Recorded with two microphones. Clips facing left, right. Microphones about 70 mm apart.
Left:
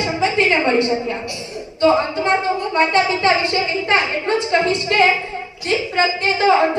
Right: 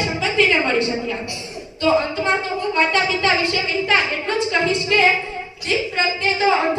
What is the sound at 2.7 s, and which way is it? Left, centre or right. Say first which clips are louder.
A woman's voice: left 2 dB; left.